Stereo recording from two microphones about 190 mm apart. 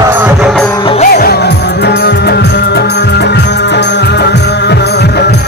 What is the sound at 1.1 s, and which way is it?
Music, 55° left (ahead or behind).